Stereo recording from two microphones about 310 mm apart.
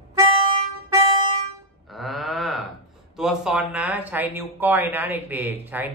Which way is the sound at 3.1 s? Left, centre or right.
Centre.